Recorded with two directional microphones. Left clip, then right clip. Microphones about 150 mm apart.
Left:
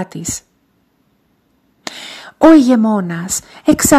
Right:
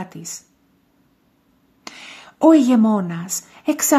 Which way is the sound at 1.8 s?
40° left (ahead or behind).